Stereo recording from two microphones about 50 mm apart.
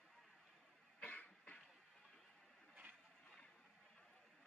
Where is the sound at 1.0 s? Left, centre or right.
Left.